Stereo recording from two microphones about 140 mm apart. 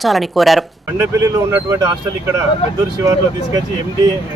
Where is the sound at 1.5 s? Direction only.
20° right (ahead or behind).